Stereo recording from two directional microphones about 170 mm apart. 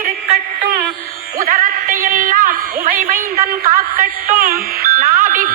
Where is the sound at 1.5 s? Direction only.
50° right (ahead or behind).